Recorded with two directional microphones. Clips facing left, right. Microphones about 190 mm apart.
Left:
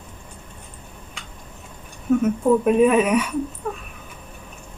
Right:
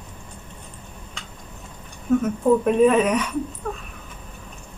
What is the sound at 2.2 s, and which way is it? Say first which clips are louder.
Speech: left 2 dB; 5° left (ahead or behind).